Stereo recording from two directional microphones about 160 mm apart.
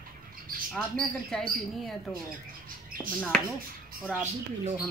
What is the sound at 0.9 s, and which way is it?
Speech, 5° left (ahead or behind).